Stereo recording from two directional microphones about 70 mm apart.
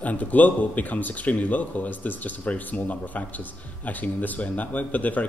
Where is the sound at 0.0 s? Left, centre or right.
Left.